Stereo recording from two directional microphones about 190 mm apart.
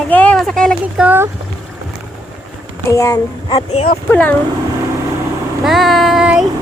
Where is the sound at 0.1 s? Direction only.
5° left (ahead or behind).